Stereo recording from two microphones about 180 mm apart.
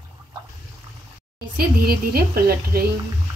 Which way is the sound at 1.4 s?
60° right (ahead or behind).